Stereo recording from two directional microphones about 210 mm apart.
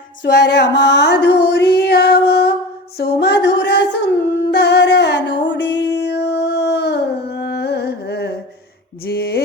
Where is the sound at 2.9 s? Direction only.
50° left (ahead or behind).